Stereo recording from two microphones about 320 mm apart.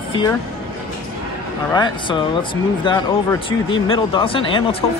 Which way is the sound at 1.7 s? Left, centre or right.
Centre.